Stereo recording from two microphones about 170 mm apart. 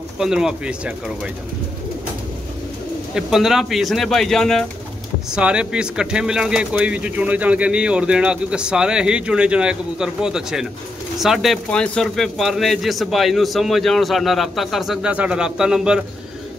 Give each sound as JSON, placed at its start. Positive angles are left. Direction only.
{"t": 0.2, "sound": "speech", "side_deg": -5}
{"t": 3.2, "sound": "speech", "side_deg": -5}